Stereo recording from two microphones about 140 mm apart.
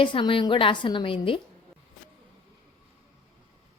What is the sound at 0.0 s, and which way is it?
A woman's voice, 35° left (ahead or behind).